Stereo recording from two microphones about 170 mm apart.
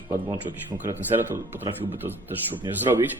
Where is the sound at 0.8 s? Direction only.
10° right (ahead or behind).